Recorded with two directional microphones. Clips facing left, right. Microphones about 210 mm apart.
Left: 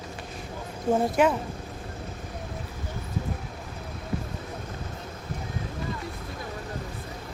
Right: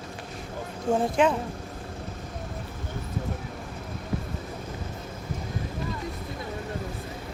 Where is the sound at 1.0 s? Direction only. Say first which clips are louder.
Even; 5° left (ahead or behind).